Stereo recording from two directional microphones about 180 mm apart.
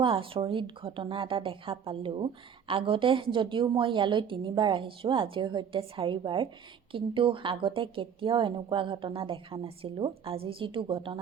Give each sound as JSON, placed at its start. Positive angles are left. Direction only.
{"t": 0.0, "sound": "a woman's voice", "side_deg": -30}